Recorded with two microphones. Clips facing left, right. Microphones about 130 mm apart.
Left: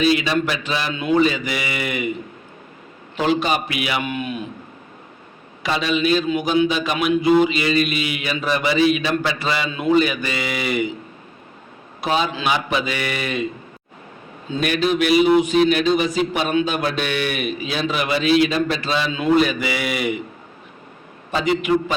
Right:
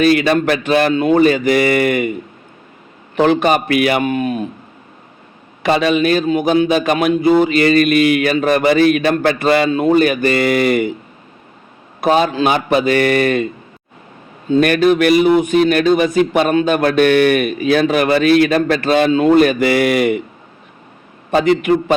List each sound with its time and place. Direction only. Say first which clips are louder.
0.0 s a man's voice: right 6 dB; 55° right (ahead or behind)
3.2 s a man's voice: right 7 dB; 55° right (ahead or behind)
5.6 s a man's voice: right 6 dB; 55° right (ahead or behind)
11.9 s a man's voice: right 8 dB; 50° right (ahead or behind)
14.5 s a man's voice: right 8 dB; 55° right (ahead or behind)
21.2 s a man's voice: right 6 dB; 55° right (ahead or behind)